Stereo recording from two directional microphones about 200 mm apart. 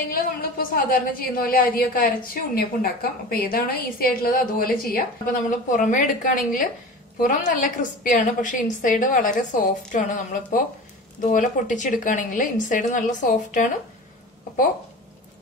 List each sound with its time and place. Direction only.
0.1 s a woman's voice: 45° left (ahead or behind)